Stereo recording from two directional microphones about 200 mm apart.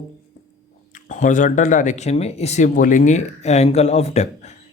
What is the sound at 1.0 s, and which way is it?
Speech, 40° left (ahead or behind).